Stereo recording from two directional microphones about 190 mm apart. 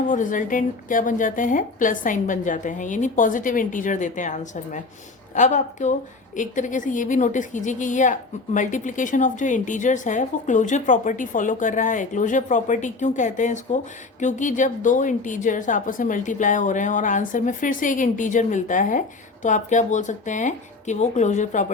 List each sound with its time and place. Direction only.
0.1 s a woman's voice: 40° left (ahead or behind)